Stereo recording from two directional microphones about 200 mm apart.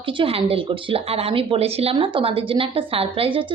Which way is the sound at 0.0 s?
25° right (ahead or behind).